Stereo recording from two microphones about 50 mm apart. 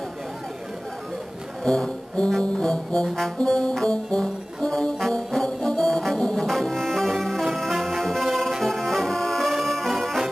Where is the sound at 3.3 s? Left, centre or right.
Centre.